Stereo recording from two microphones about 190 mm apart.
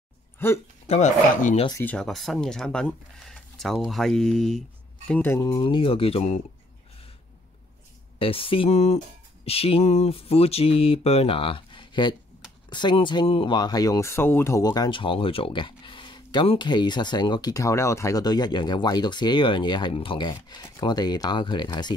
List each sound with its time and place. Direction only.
0.4 s speech: 10° left (ahead or behind)
0.8 s music: 35° left (ahead or behind)
1.7 s speech: 10° left (ahead or behind); by 6.4 s 30° left (ahead or behind)
8.2 s music: 30° left (ahead or behind)
12.6 s speech: 25° left (ahead or behind)